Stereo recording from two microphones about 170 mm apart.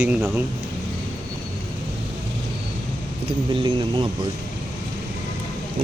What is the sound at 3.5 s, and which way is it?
Speech, 30° right (ahead or behind).